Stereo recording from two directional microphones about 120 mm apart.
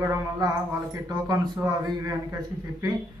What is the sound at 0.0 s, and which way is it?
Speech, 25° right (ahead or behind).